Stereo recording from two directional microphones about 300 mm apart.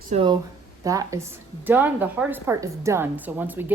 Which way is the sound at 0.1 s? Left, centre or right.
Centre.